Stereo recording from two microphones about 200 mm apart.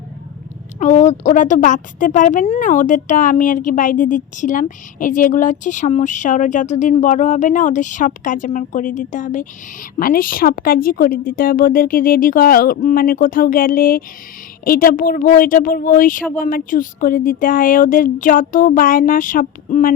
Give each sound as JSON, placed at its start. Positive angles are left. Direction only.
{"t": 0.8, "sound": "a woman's voice", "side_deg": 35}